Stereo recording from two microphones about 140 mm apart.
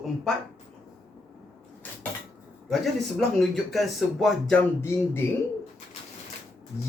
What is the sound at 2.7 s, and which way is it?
Speech, centre (ahead or behind).